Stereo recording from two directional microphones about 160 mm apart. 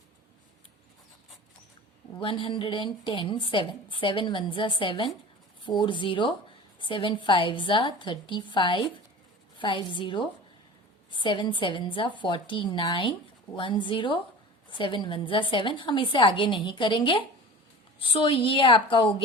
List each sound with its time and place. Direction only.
2.2 s a woman's voice: 30° left (ahead or behind)